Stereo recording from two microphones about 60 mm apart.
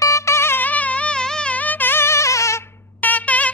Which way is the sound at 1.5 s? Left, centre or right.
Left.